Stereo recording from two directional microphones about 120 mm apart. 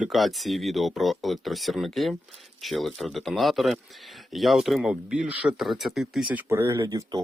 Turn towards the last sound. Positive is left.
turn(degrees=-30)  # may be behind; listen again after turning